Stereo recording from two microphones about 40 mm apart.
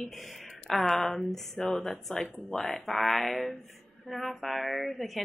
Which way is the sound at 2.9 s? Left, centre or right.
Centre.